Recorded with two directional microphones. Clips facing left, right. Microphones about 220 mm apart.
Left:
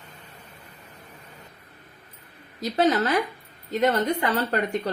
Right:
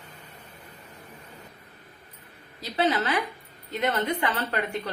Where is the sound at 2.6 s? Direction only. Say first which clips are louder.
Left 4 dB; 45° left (ahead or behind).